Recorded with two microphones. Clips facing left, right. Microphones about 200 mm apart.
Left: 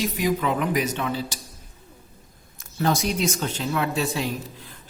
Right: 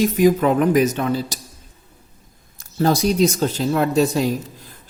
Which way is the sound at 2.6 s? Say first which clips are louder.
Right 6 dB; 35° right (ahead or behind).